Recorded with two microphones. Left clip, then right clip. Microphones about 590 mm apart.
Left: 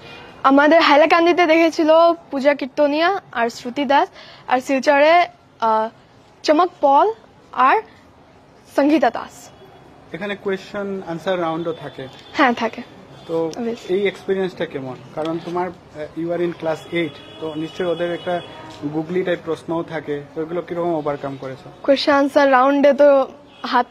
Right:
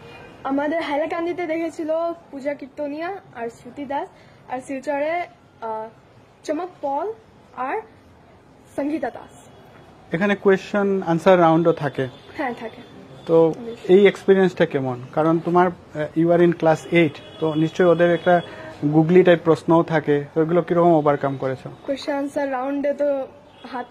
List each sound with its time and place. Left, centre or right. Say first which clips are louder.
0.4 s a woman's voice: left 11 dB; left
10.1 s a man's voice: right 6 dB; right
13.3 s a man's voice: right 5 dB; right
21.9 s a woman's voice: left 10 dB; left